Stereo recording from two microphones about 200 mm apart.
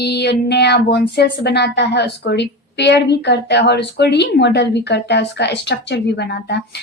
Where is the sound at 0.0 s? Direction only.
60° left (ahead or behind).